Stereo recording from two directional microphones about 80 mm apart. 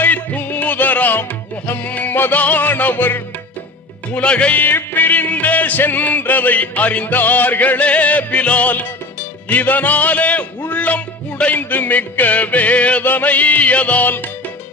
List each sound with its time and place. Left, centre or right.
0.0 s music: centre